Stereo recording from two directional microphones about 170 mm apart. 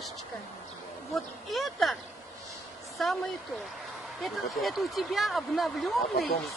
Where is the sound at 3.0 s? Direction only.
Centre (ahead or behind).